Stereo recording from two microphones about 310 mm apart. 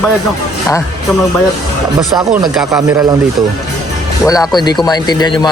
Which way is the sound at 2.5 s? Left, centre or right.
Centre.